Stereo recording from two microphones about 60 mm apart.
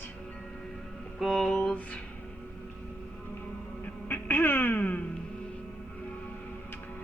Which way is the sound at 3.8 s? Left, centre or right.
Left.